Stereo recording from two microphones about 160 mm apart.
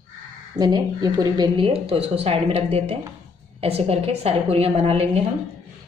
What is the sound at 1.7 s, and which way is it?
A woman's voice, 40° right (ahead or behind).